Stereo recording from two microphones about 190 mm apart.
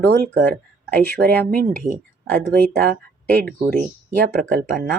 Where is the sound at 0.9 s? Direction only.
10° left (ahead or behind).